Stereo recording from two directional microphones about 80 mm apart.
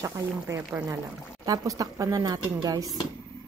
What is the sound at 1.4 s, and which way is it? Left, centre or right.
Speech, right.